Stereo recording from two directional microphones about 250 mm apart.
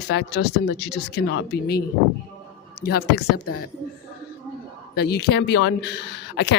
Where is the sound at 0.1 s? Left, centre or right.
Left.